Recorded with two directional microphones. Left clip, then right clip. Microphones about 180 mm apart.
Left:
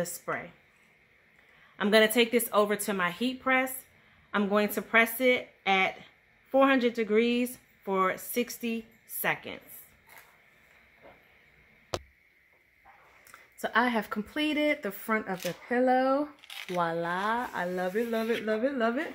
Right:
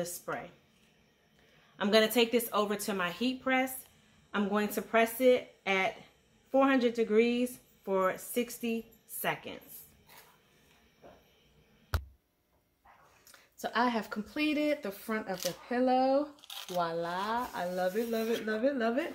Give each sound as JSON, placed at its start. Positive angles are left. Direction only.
{"t": 0.0, "sound": "speech", "side_deg": 55}
{"t": 1.8, "sound": "speech", "side_deg": 50}
{"t": 13.6, "sound": "speech", "side_deg": 45}
{"t": 15.7, "sound": "speech", "side_deg": 55}
{"t": 16.4, "sound": "a sound", "side_deg": -15}
{"t": 16.7, "sound": "speech", "side_deg": 45}